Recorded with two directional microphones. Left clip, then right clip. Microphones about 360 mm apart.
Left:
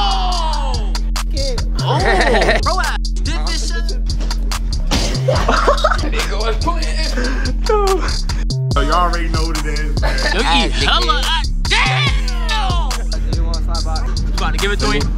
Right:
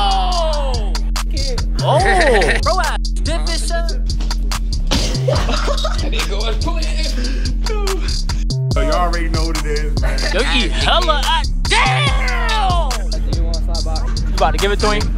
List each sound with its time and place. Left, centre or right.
0.0 s music: centre
2.0 s sheep: left
2.6 s music: centre
5.1 s music: centre
8.5 s music: centre
14.4 s speech: centre